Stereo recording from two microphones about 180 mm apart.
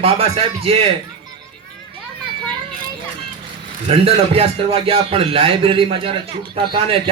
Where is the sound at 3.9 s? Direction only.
30° right (ahead or behind).